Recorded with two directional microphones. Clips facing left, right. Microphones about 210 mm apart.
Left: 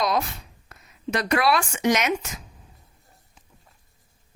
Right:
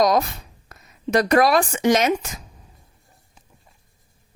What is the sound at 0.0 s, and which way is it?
Speech, 40° right (ahead or behind).